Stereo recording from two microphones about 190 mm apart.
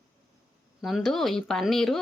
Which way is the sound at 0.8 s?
Centre (ahead or behind).